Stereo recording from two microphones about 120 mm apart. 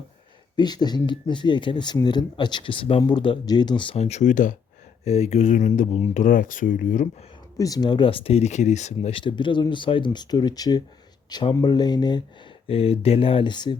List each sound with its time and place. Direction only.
0.5 s speech: 35° left (ahead or behind)
3.9 s speech: 65° left (ahead or behind); by 4.5 s 90° left
5.0 s speech: 60° left (ahead or behind)
6.1 s speech: 90° left
7.6 s speech: 35° left (ahead or behind); by 9.1 s 75° left (ahead or behind)
9.2 s speech: 40° left (ahead or behind)
12.6 s speech: 55° left (ahead or behind); by 13.7 s 40° left (ahead or behind)